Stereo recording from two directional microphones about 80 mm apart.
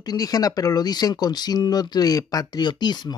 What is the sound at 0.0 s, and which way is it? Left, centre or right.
Speech, left.